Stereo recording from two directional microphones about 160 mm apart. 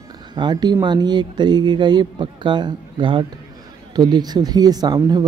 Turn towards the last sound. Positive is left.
turn(degrees=-25)  # may be behind; listen again after turning